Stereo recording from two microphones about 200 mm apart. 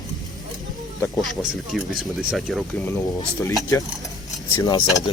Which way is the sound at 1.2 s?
Centre (ahead or behind).